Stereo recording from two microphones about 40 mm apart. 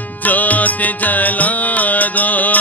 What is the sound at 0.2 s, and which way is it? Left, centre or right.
Music, left.